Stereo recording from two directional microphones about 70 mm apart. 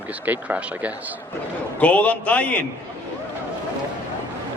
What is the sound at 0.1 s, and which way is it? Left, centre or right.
Speech, right.